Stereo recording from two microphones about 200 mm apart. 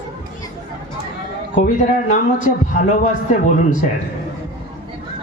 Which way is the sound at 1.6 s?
35° left (ahead or behind).